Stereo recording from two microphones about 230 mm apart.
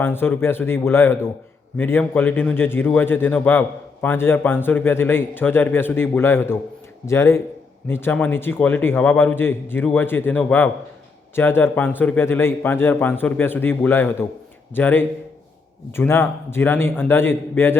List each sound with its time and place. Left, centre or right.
0.0 s speech: centre